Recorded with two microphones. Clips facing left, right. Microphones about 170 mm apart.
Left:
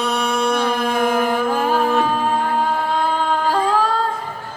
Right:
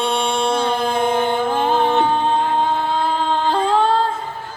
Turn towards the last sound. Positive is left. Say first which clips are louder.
# right 2 dB
turn(degrees=-25)  # may be behind; listen again after turning